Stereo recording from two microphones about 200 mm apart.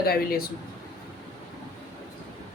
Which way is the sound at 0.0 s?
50° left (ahead or behind).